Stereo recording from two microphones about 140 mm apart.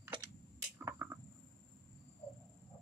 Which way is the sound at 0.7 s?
20° right (ahead or behind).